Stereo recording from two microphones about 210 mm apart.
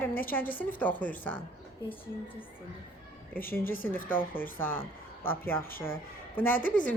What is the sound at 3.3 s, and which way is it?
Speech, 10° left (ahead or behind).